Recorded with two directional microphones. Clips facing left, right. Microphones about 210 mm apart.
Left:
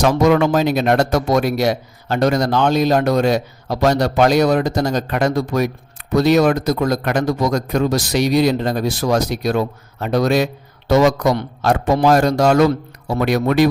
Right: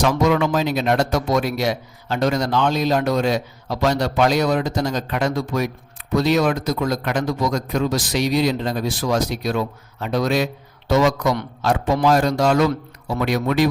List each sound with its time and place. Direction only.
0.0 s speech: 45° left (ahead or behind)